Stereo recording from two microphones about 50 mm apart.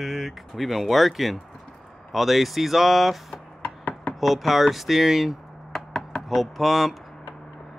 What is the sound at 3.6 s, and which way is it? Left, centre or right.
Chopping, left.